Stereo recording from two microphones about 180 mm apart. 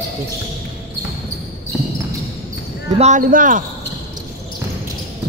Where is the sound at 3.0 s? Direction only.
45° right (ahead or behind).